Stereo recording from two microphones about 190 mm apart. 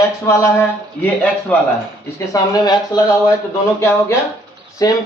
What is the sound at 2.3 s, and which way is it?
Speech, 20° left (ahead or behind).